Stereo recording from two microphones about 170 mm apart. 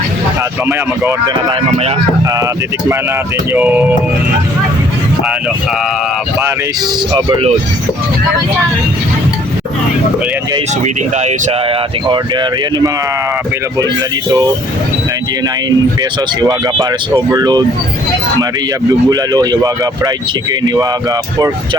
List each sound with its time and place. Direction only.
3.5 s organ: 10° right (ahead or behind)
7.1 s speech: 25° right (ahead or behind)
10.8 s speech: 40° right (ahead or behind)
12.0 s speech: 25° right (ahead or behind)
16.4 s speech: 25° right (ahead or behind)
19.1 s speech: 20° right (ahead or behind)